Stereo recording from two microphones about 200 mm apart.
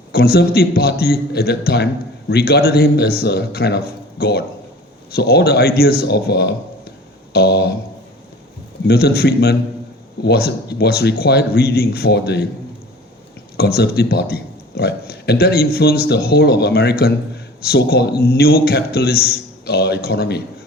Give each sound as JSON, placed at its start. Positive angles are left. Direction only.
{"t": 0.1, "sound": "speech", "side_deg": 50}
{"t": 8.9, "sound": "speech", "side_deg": 50}
{"t": 13.6, "sound": "speech", "side_deg": 50}